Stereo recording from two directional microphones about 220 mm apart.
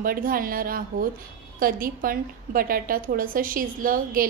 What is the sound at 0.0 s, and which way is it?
A woman's voice, 40° right (ahead or behind).